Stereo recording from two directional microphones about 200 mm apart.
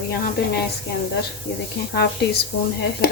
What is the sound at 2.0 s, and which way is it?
Speech, 55° left (ahead or behind).